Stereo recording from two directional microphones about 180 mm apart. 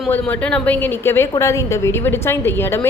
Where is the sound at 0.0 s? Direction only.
10° left (ahead or behind).